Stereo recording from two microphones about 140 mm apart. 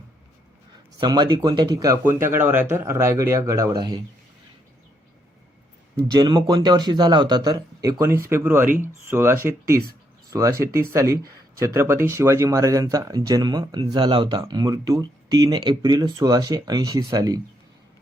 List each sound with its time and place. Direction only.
0.9 s speech: 30° right (ahead or behind)
6.1 s speech: 30° right (ahead or behind)
8.6 s speech: 70° right (ahead or behind)
9.0 s speech: 15° right (ahead or behind)